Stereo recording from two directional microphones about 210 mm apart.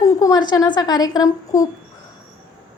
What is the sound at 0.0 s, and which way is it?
A woman's voice, 15° left (ahead or behind).